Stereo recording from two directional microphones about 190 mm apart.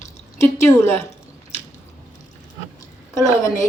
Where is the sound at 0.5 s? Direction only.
15° left (ahead or behind).